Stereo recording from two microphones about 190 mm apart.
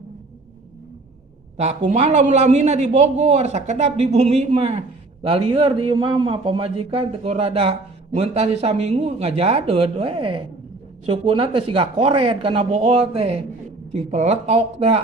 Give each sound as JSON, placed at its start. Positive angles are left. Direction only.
{"t": 1.5, "sound": "a man's voice", "side_deg": -35}